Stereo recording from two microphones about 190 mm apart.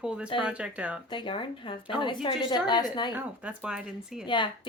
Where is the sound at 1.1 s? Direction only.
25° left (ahead or behind).